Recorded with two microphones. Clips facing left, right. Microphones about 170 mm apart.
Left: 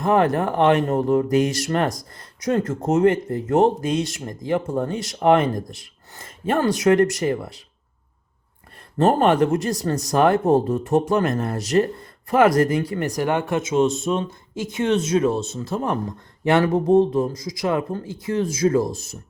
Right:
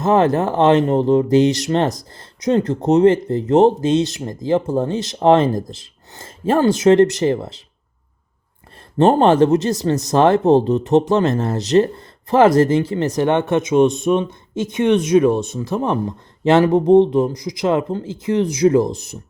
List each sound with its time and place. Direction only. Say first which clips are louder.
0.0 s speech: right 3 dB; 25° right (ahead or behind)
9.0 s speech: right 4 dB; 25° right (ahead or behind)